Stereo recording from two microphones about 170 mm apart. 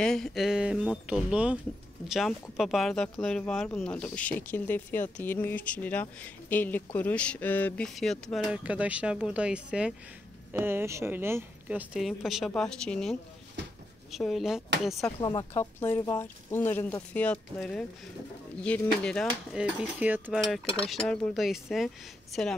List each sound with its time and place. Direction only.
0.0 s speech: 5° left (ahead or behind)
15.1 s speech: 25° left (ahead or behind)
15.5 s speech: 10° left (ahead or behind)
20.0 s speech: 10° right (ahead or behind)
20.3 s speech: centre (ahead or behind)